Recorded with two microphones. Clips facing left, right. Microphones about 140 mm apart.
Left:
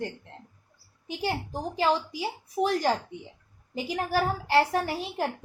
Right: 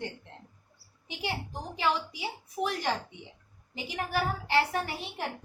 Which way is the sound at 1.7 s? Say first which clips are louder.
Left 4 dB; 35° left (ahead or behind).